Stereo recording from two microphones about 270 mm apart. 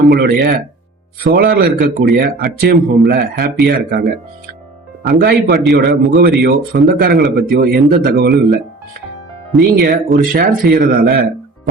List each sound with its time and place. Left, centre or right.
0.0 s speech: right
9.7 s speech: right